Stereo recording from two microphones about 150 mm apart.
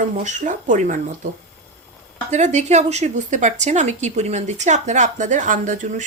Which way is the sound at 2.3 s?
50° right (ahead or behind).